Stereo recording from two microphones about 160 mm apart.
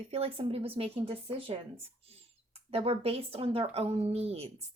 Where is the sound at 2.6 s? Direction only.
40° right (ahead or behind).